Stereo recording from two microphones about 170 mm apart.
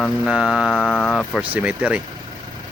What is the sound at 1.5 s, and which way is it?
Speech, 10° right (ahead or behind).